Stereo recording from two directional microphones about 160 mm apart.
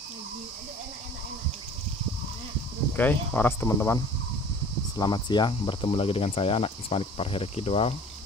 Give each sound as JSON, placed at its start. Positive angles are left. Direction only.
{"t": 3.0, "sound": "speech", "side_deg": 10}
{"t": 4.9, "sound": "speech", "side_deg": 25}